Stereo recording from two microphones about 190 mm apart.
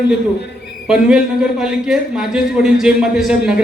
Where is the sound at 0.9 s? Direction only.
5° right (ahead or behind).